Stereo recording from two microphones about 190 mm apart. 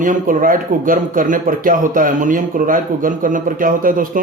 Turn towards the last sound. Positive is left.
turn(degrees=-45)  # may be behind; listen again after turning